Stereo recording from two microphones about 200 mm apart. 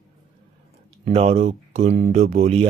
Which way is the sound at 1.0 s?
30° right (ahead or behind).